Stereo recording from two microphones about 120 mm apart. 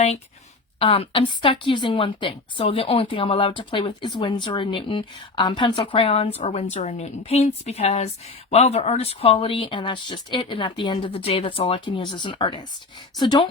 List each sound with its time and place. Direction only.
0.8 s a woman's voice: 50° left (ahead or behind)
6.4 s a woman's voice: 70° left (ahead or behind); by 13.5 s 40° left (ahead or behind)